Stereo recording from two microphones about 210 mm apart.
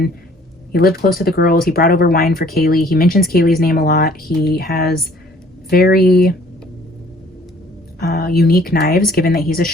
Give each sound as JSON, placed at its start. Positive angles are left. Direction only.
{"t": 0.7, "sound": "speech", "side_deg": 45}
{"t": 8.0, "sound": "speech", "side_deg": 45}